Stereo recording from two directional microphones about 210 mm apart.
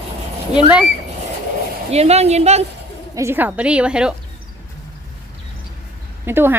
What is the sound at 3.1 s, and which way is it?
A woman's voice, 15° right (ahead or behind).